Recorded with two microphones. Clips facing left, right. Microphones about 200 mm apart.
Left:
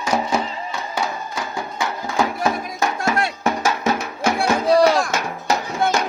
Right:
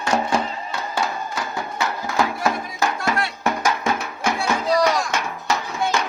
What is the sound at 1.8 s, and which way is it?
Music, 15° left (ahead or behind).